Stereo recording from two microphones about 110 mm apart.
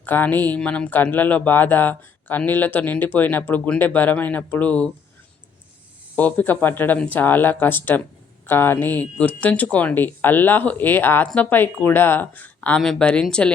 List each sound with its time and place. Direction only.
0.0 s speech: 15° left (ahead or behind)
6.1 s speech: 15° left (ahead or behind)